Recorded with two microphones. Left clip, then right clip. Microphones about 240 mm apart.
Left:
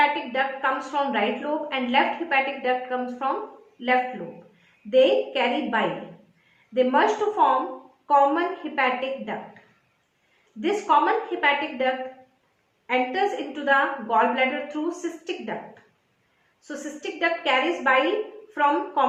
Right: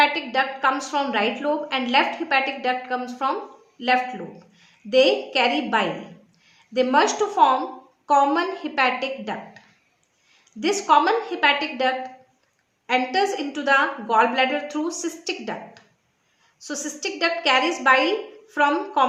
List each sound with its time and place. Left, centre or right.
0.0 s a woman's voice: right
4.9 s a woman's voice: right
10.6 s a woman's voice: right
12.9 s a woman's voice: right
16.6 s a woman's voice: right